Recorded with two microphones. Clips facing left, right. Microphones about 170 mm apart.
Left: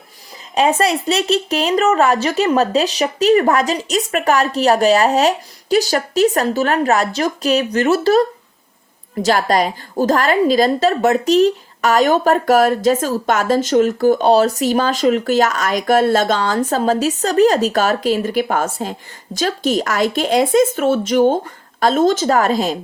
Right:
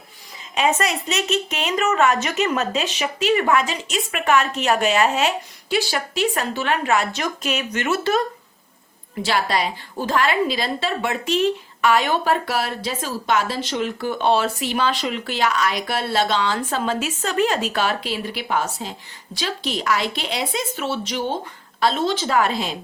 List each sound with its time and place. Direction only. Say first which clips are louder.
0.5 s a woman's voice: left 5 dB; 35° left (ahead or behind)